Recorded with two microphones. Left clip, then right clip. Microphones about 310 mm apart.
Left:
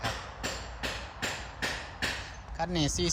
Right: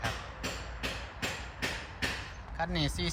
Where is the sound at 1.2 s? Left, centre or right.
Left.